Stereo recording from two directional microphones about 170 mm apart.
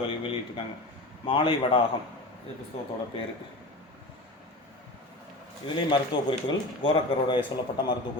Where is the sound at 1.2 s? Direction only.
30° left (ahead or behind).